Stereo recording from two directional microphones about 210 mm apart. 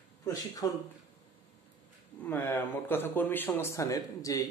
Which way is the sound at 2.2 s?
10° left (ahead or behind).